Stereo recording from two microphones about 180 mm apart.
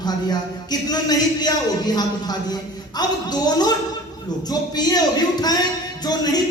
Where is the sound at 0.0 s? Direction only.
20° left (ahead or behind).